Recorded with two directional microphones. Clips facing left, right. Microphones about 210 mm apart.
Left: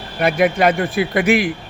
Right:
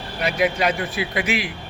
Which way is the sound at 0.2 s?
55° left (ahead or behind).